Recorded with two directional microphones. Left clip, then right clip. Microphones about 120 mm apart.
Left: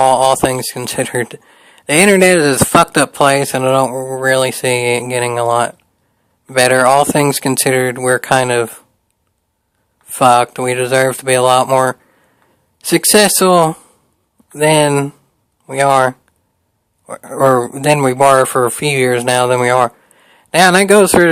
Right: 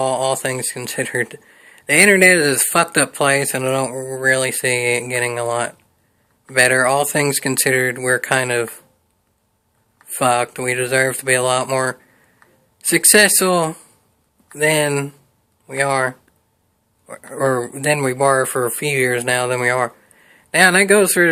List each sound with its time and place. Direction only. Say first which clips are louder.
0.0 s speech: left 9 dB; 55° left (ahead or behind)
10.2 s speech: left 7 dB; 50° left (ahead or behind)